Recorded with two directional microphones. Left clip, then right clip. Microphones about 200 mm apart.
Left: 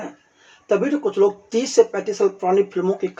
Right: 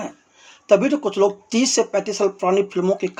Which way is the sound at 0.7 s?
25° right (ahead or behind).